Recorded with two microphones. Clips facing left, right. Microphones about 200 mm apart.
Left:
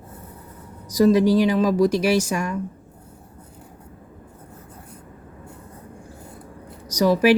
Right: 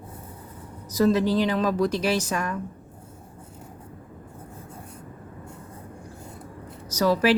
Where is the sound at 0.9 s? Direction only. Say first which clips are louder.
Left 5 dB; 15° left (ahead or behind).